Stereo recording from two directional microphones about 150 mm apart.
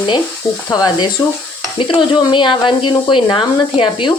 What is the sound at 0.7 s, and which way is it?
Speech, 30° left (ahead or behind).